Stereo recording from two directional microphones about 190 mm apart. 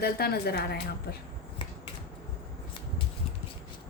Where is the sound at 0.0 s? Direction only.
55° left (ahead or behind).